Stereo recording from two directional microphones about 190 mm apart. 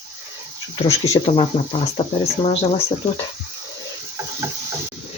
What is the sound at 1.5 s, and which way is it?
Speech, 30° left (ahead or behind).